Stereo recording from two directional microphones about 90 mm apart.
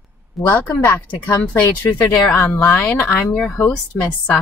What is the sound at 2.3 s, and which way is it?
A woman's voice, 20° left (ahead or behind).